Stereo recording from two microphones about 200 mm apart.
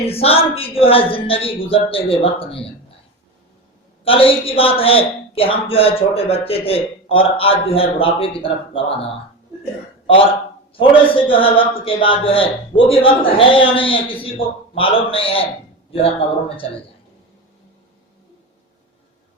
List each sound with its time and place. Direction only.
0.1 s a man's voice: 30° left (ahead or behind)
4.0 s a man's voice: 25° left (ahead or behind)
10.8 s a man's voice: 25° left (ahead or behind)